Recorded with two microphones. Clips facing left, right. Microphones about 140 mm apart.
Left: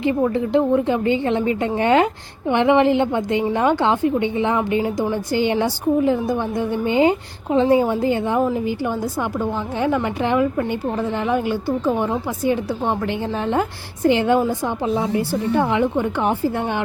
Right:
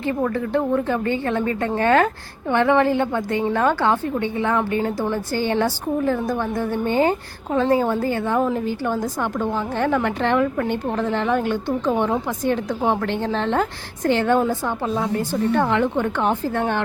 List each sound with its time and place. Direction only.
0.0 s a woman's voice: 15° left (ahead or behind)
8.4 s a woman's voice: 5° left (ahead or behind)
13.1 s a woman's voice: 10° left (ahead or behind)